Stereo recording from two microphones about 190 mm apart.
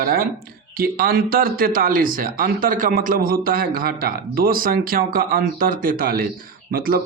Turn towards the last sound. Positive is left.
turn(degrees=-50)  # may be behind; listen again after turning